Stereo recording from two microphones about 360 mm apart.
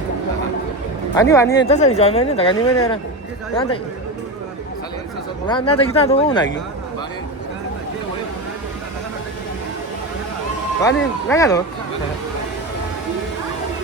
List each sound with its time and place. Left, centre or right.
1.1 s speech: centre
5.5 s speech: centre
10.8 s speech: centre